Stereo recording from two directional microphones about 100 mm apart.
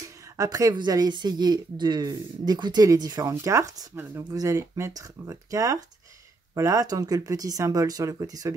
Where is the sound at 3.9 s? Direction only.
20° right (ahead or behind).